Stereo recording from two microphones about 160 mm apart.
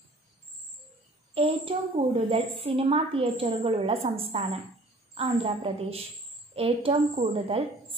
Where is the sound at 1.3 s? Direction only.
35° right (ahead or behind).